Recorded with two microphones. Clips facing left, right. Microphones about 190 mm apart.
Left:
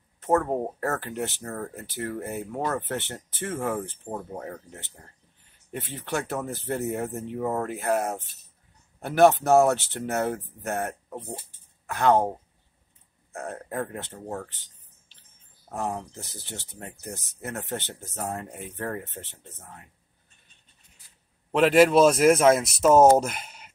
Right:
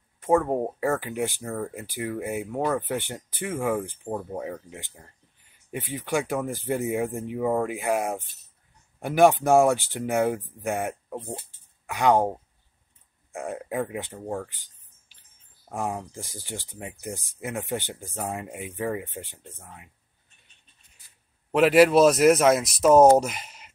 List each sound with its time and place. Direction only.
0.2 s speech: 10° right (ahead or behind)
13.3 s speech: 15° right (ahead or behind)
21.5 s speech: 5° right (ahead or behind)
23.3 s a sound: 5° left (ahead or behind)